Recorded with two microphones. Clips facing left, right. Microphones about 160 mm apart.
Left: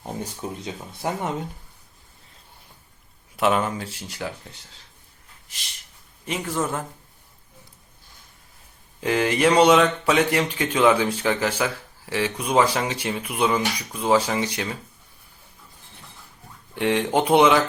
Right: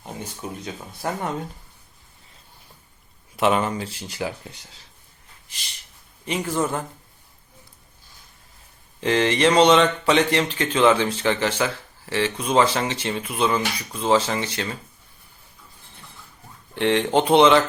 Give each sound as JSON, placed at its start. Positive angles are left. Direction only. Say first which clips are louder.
{"t": 0.4, "sound": "speech", "louder": "even", "side_deg": 30}
{"t": 1.0, "sound": "speech", "louder": "even", "side_deg": 20}
{"t": 3.3, "sound": "speech", "louder": "right 1 dB", "side_deg": 0}
{"t": 5.5, "sound": "a sound", "louder": "right 1 dB", "side_deg": 0}
{"t": 6.2, "sound": "speech", "louder": "right 2 dB", "side_deg": 0}
{"t": 9.0, "sound": "speech", "louder": "right 1 dB", "side_deg": 5}
{"t": 16.7, "sound": "speech", "louder": "right 2 dB", "side_deg": 10}